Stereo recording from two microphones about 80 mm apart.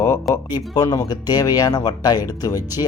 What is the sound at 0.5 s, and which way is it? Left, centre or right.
Speech, left.